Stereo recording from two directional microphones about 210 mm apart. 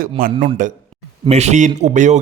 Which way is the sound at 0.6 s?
40° right (ahead or behind).